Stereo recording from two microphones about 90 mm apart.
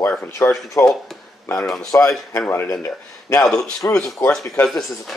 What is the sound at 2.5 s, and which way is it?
Speech, 25° left (ahead or behind).